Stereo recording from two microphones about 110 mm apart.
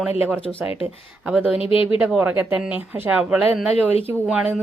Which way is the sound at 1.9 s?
10° right (ahead or behind).